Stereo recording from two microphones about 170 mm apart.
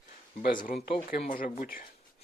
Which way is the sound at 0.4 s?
55° left (ahead or behind).